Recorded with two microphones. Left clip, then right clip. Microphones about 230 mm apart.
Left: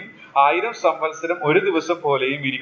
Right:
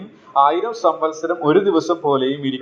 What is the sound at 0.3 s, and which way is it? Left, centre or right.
A man's voice, right.